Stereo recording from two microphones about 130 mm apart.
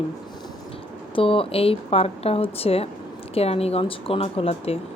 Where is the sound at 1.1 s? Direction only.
45° left (ahead or behind).